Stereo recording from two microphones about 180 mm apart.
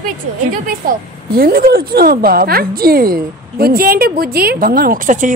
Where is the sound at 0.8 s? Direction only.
50° right (ahead or behind).